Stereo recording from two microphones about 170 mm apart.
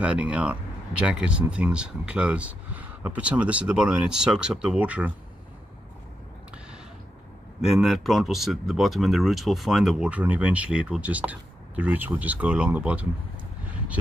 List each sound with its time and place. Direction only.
0.0 s speech: 5° right (ahead or behind)
7.7 s speech: centre (ahead or behind)